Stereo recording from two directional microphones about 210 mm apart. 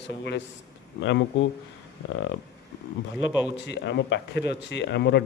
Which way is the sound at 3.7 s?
55° left (ahead or behind).